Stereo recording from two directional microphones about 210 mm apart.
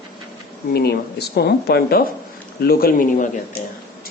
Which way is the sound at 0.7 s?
50° left (ahead or behind).